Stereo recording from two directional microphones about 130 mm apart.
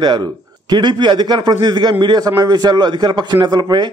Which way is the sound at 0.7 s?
35° right (ahead or behind).